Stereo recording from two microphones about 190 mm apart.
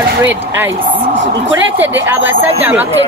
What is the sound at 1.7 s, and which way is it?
Speech, 10° right (ahead or behind).